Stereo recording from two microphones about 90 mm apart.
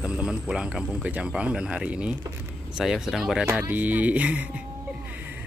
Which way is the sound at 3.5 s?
20° right (ahead or behind).